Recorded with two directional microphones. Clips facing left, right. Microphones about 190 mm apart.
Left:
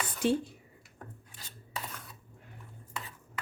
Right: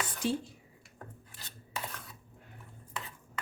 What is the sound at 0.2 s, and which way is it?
Speech, 60° left (ahead or behind).